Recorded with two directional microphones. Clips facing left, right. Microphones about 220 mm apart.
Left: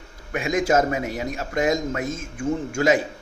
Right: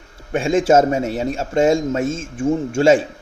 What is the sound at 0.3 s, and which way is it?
A man's voice, 30° right (ahead or behind).